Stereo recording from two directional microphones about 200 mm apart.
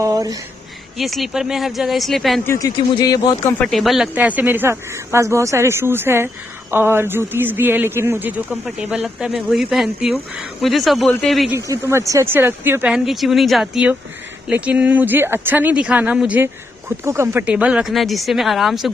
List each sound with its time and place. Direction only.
0.0 s speech: 15° right (ahead or behind)
0.9 s speech: centre (ahead or behind)
2.4 s a man's voice: 15° left (ahead or behind)
3.5 s speech: 5° left (ahead or behind)
11.5 s speech: 15° right (ahead or behind)